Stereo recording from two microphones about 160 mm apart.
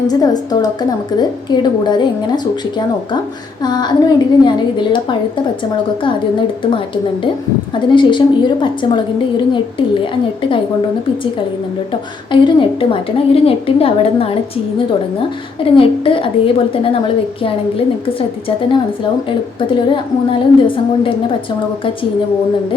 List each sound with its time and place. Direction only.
0.1 s a woman's voice: 25° left (ahead or behind)
7.9 s a woman's voice: 30° left (ahead or behind)
12.3 s a woman's voice: 30° left (ahead or behind)
15.6 s a woman's voice: 35° left (ahead or behind)
17.4 s a woman's voice: 35° left (ahead or behind)